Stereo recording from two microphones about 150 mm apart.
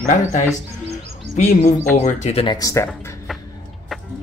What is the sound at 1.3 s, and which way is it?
Speech, 55° left (ahead or behind).